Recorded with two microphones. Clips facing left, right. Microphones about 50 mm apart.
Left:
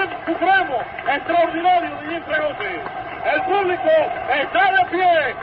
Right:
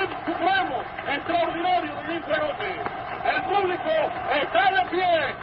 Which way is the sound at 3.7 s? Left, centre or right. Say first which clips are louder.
Left 7 dB; left.